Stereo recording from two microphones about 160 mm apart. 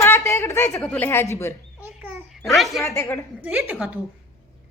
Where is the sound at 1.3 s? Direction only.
15° left (ahead or behind).